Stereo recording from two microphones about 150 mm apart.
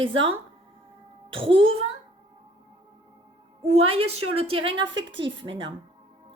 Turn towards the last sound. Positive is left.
turn(degrees=-35)  # may be behind; listen again after turning